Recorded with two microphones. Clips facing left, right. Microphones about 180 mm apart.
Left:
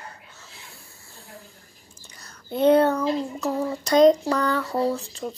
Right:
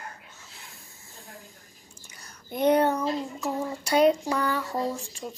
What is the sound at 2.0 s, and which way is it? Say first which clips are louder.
Speech: left 2 dB; 10° right (ahead or behind).